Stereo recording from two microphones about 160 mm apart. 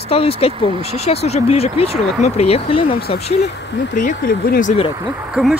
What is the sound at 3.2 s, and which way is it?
Speech, 40° left (ahead or behind).